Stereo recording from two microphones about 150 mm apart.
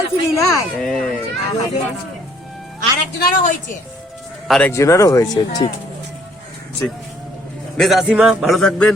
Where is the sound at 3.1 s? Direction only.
80° left.